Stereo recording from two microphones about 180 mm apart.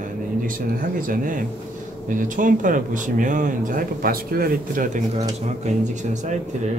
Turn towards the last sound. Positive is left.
turn(degrees=-40)  # may be behind; listen again after turning